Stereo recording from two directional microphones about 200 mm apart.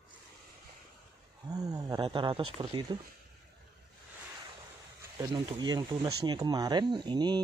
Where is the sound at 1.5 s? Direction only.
20° right (ahead or behind).